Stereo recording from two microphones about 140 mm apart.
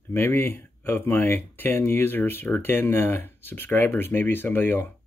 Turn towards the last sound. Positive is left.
turn(degrees=15)  # may be behind; listen again after turning